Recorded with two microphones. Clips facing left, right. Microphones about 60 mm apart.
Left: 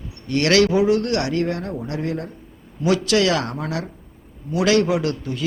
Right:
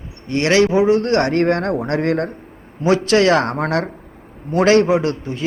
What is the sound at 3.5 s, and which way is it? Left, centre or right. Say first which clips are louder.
Speech: right 7 dB; right.